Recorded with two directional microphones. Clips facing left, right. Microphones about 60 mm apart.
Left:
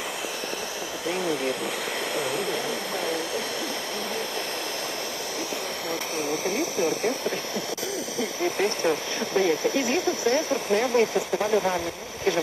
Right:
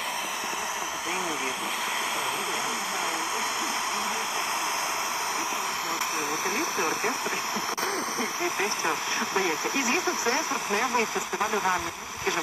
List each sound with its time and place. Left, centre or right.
8.5 s speech: centre